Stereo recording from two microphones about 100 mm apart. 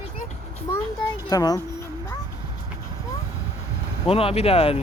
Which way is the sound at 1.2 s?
40° left (ahead or behind).